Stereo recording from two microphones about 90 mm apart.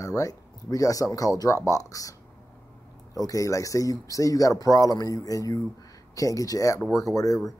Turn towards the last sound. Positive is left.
turn(degrees=40)  # may be behind; listen again after turning